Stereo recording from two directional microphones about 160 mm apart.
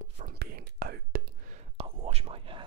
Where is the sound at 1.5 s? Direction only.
40° right (ahead or behind).